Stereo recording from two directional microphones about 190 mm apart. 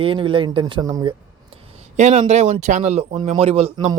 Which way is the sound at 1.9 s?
35° right (ahead or behind).